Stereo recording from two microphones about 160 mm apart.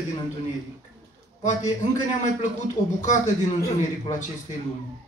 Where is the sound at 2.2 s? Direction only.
50° left (ahead or behind).